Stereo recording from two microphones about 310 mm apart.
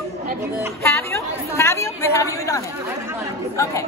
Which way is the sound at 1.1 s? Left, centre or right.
Centre.